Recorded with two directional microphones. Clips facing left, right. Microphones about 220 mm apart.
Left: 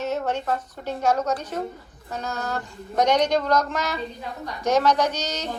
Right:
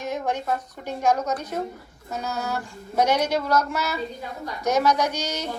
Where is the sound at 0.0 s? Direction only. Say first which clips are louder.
Left 2 dB; 10° right (ahead or behind).